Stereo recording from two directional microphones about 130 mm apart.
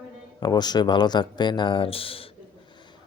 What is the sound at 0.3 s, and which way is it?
Speech, 30° left (ahead or behind).